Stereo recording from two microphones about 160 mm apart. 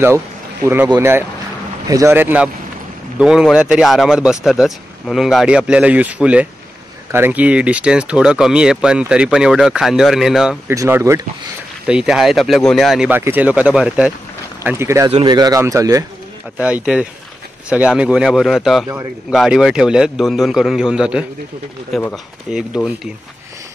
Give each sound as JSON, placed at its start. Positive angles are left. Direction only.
{"t": 0.9, "sound": "speech", "side_deg": -15}
{"t": 10.7, "sound": "speech", "side_deg": -20}
{"t": 11.8, "sound": "speech", "side_deg": -5}
{"t": 16.5, "sound": "speech", "side_deg": -10}